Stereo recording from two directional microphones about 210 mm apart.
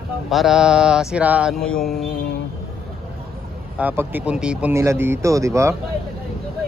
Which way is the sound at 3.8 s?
10° right (ahead or behind).